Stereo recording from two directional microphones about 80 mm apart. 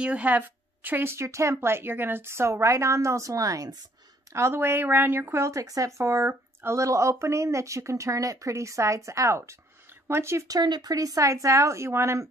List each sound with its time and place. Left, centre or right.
0.0 s speech: centre; by 3.7 s right
4.3 s speech: right
10.5 s speech: right